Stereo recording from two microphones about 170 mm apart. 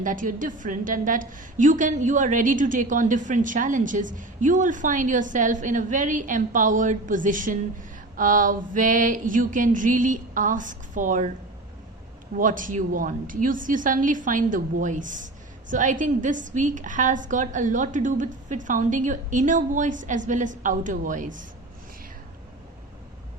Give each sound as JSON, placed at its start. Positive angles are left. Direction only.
{"t": 0.0, "sound": "a woman's voice", "side_deg": -50}
{"t": 12.4, "sound": "a woman's voice", "side_deg": -50}